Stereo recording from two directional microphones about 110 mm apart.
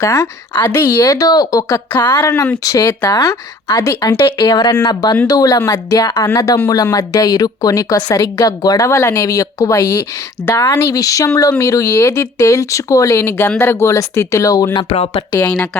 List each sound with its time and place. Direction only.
0.0 s a woman's voice: 30° left (ahead or behind)
1.9 s a woman's voice: 20° left (ahead or behind)
2.6 s a woman's voice: 35° left (ahead or behind)
4.4 s a woman's voice: 40° left (ahead or behind)
10.4 s speech: 20° left (ahead or behind)
10.7 s a woman's voice: 30° left (ahead or behind)
14.9 s speech: 55° left (ahead or behind)
15.4 s speech: 20° left (ahead or behind)